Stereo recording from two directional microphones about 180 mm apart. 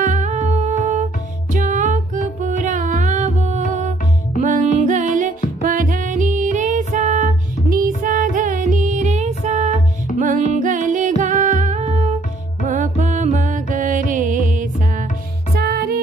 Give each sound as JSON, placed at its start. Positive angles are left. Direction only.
{"t": 0.0, "sound": "music", "side_deg": -40}
{"t": 15.5, "sound": "music", "side_deg": -60}